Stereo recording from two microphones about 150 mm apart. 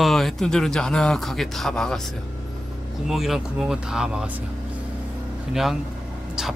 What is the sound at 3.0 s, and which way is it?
Speech, centre (ahead or behind).